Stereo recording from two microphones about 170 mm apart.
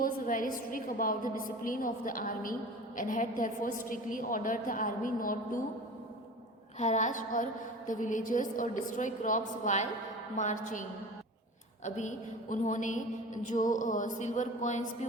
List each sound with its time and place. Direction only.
0.0 s a woman's voice: 55° left (ahead or behind)
6.7 s a woman's voice: 45° left (ahead or behind)
11.9 s a woman's voice: 45° left (ahead or behind)